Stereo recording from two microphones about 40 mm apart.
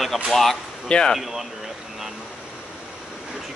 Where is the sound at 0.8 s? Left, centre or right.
Left.